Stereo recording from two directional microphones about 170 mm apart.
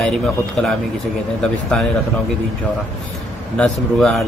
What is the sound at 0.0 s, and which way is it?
A man's voice, 5° left (ahead or behind).